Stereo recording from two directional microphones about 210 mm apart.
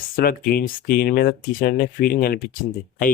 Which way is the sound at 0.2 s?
45° left (ahead or behind).